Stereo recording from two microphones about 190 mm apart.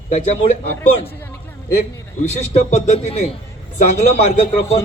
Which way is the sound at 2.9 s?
35° left (ahead or behind).